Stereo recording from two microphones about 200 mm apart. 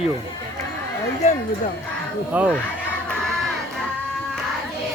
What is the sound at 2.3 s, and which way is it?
Speech, 5° right (ahead or behind).